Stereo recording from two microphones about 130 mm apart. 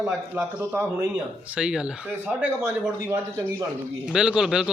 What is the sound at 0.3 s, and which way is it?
Speech, 20° right (ahead or behind).